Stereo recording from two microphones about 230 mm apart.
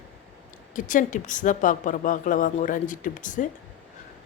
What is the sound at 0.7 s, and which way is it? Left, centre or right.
Speech, left.